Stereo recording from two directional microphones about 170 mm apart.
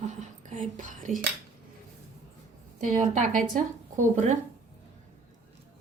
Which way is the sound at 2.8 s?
50° right (ahead or behind).